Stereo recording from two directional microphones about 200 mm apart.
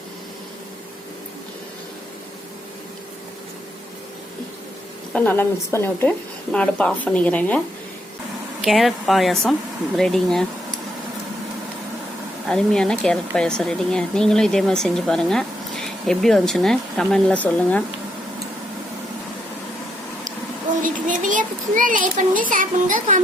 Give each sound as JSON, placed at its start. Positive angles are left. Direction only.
{"t": 5.1, "sound": "speech", "side_deg": 10}
{"t": 8.6, "sound": "speech", "side_deg": 0}
{"t": 12.5, "sound": "speech", "side_deg": 5}
{"t": 20.8, "sound": "a child's voice", "side_deg": -40}